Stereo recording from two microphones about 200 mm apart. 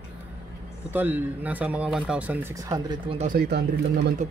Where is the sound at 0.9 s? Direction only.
10° right (ahead or behind).